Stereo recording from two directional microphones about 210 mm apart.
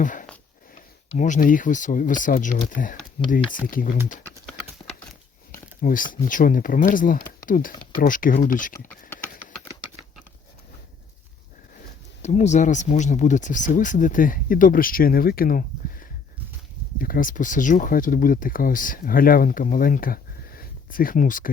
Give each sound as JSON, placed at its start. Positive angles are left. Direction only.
{"t": 0.0, "sound": "speech", "side_deg": 40}
{"t": 5.5, "sound": "speech", "side_deg": 40}
{"t": 11.8, "sound": "speech", "side_deg": 35}